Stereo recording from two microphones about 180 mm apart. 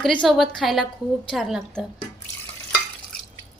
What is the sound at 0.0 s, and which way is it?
A woman's voice, centre (ahead or behind).